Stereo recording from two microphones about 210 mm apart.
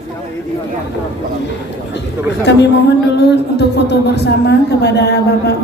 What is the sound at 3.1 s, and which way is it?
A woman's voice, 50° left (ahead or behind).